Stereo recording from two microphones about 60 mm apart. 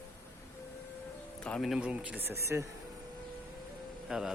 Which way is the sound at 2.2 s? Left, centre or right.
Right.